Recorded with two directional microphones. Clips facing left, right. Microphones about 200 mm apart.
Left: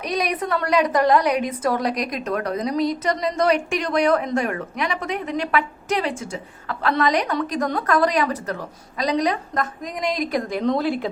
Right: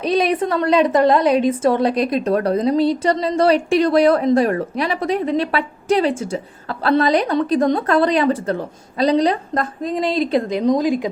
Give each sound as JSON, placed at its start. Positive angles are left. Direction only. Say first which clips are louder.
{"t": 0.0, "sound": "a woman's voice", "louder": "right 7 dB", "side_deg": -30}
{"t": 10.6, "sound": "a woman's voice", "louder": "right 3 dB", "side_deg": -15}